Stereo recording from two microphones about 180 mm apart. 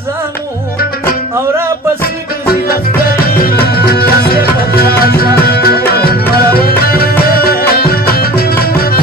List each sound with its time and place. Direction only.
2.4 s music: 55° left (ahead or behind)